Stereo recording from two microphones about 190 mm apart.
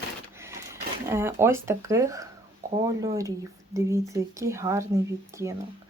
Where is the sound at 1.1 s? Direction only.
15° right (ahead or behind).